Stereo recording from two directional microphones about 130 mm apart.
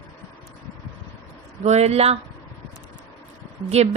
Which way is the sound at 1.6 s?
55° right (ahead or behind).